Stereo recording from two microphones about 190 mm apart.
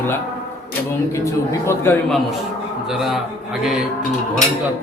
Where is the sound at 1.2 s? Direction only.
15° left (ahead or behind).